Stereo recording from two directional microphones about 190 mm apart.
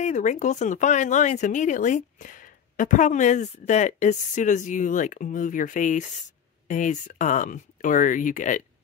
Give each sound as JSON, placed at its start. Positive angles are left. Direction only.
{"t": 0.0, "sound": "speech", "side_deg": 40}